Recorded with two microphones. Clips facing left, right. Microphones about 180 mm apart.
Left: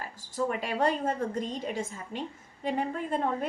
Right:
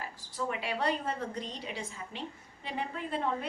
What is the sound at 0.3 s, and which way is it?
A woman's voice, 45° left (ahead or behind).